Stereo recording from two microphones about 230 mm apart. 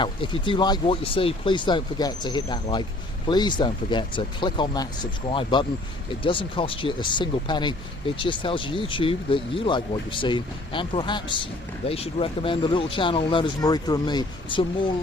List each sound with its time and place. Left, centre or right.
0.0 s speech: left